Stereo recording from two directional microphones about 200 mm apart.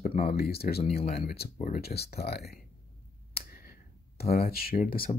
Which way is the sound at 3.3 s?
50° left (ahead or behind).